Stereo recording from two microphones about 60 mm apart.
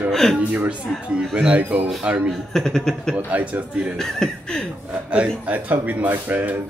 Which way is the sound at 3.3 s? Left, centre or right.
Right.